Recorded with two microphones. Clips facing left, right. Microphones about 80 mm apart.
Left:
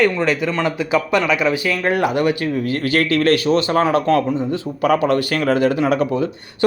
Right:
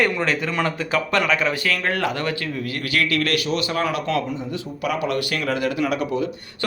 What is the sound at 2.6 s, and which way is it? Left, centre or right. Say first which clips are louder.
Speech: left 4 dB; left.